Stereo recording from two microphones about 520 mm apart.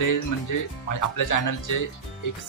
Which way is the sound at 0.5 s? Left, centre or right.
Left.